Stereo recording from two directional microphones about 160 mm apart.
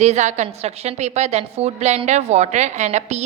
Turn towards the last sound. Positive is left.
turn(degrees=-45)  # may be behind; listen again after turning